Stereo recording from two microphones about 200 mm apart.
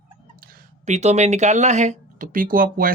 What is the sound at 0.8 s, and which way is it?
Speech, 35° right (ahead or behind).